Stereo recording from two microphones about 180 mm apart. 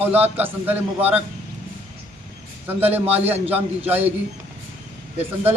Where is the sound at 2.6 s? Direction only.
10° right (ahead or behind).